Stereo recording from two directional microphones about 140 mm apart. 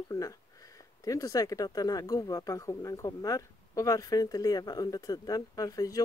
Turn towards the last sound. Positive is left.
turn(degrees=25)  # may be behind; listen again after turning